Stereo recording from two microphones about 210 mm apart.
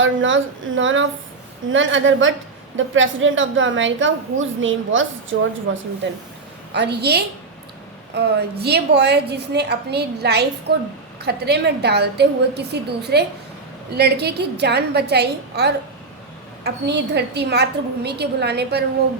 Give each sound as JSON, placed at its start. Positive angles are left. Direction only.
{"t": 0.0, "sound": "a woman's voice", "side_deg": -65}
{"t": 6.7, "sound": "a woman's voice", "side_deg": -50}